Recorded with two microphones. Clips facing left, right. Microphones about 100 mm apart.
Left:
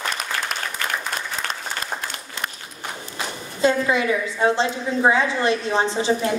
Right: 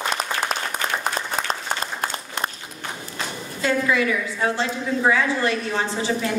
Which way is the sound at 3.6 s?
20° left (ahead or behind).